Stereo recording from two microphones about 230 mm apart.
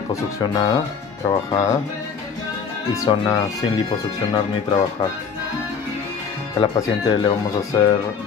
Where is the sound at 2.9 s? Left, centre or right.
Centre.